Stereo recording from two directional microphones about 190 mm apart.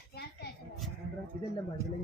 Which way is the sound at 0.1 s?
55° left (ahead or behind).